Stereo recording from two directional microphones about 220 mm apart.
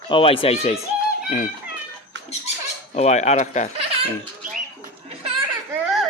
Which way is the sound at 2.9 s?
30° left (ahead or behind).